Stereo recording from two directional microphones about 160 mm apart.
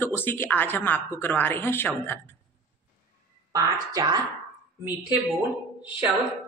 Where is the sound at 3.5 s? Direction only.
25° right (ahead or behind).